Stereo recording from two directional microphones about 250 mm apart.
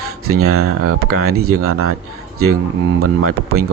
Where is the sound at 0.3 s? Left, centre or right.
Right.